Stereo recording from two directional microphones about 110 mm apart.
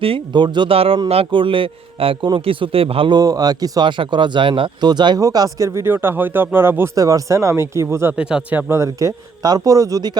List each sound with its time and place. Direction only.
0.0 s a man's voice: 50° right (ahead or behind)
3.2 s speech: 35° right (ahead or behind); by 6.9 s 20° right (ahead or behind)
6.9 s speech: 30° right (ahead or behind)
8.1 s speech: 10° right (ahead or behind)
8.7 s speech: 30° right (ahead or behind)